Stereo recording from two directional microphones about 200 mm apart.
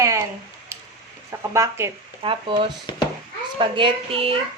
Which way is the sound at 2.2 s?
25° right (ahead or behind).